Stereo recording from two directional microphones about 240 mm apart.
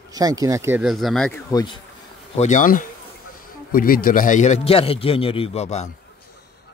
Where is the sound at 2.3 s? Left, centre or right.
Left.